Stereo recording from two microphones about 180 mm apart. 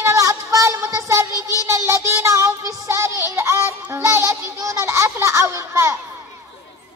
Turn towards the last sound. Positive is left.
turn(degrees=-15)  # may be behind; listen again after turning